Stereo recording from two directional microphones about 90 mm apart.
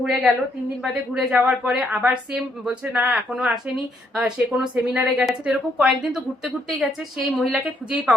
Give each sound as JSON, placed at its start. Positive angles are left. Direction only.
{"t": 0.0, "sound": "a woman's voice", "side_deg": -5}
{"t": 2.9, "sound": "speech", "side_deg": -20}
{"t": 3.3, "sound": "a woman's voice", "side_deg": -5}